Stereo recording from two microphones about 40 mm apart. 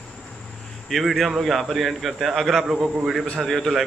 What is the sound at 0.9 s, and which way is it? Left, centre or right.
A man's voice, centre.